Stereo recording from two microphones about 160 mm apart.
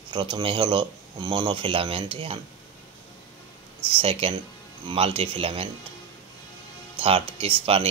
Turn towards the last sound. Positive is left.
turn(degrees=-35)  # may be behind; listen again after turning